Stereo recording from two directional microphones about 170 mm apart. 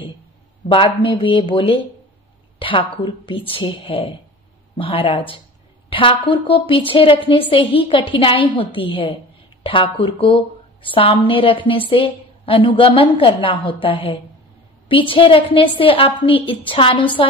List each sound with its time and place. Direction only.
0.7 s a woman's voice: 30° left (ahead or behind)